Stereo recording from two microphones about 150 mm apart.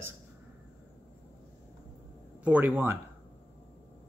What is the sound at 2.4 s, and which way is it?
Speech, 10° right (ahead or behind).